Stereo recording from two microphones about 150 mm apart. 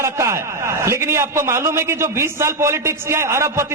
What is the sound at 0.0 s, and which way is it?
A man's voice, 20° right (ahead or behind).